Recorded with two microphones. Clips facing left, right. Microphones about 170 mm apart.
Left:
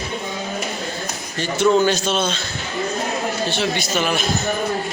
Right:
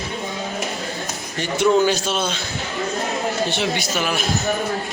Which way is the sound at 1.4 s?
15° right (ahead or behind).